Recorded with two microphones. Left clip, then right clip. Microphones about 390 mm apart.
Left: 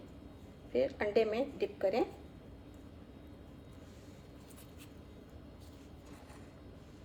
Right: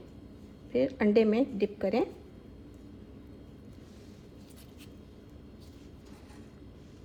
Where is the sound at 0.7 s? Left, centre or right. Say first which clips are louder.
Right 5 dB; centre.